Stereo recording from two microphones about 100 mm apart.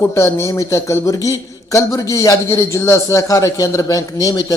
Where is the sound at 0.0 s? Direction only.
25° left (ahead or behind).